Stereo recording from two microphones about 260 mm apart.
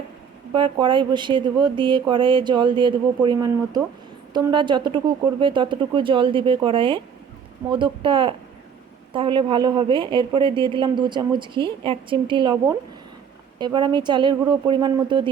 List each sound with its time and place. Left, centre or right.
0.5 s speech: centre